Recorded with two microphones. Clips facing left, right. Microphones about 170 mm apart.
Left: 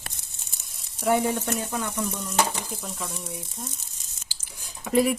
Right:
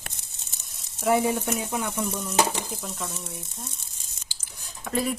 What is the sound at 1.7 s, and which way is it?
Sizzle, 10° right (ahead or behind).